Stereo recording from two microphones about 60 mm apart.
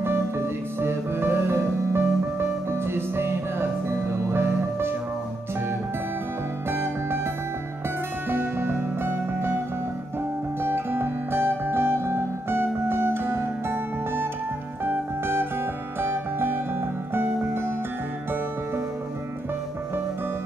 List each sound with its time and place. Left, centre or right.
0.7 s music: right
6.7 s music: right
8.3 s music: right
10.6 s music: right